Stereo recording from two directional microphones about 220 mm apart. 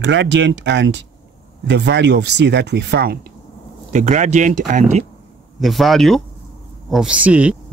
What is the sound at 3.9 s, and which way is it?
Speech, 35° right (ahead or behind).